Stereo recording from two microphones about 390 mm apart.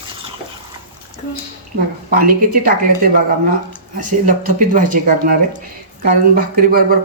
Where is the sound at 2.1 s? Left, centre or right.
Right.